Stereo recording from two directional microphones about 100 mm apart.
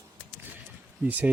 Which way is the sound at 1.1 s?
15° right (ahead or behind).